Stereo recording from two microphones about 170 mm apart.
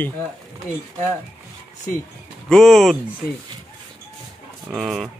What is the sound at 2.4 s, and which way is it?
Speech, centre (ahead or behind).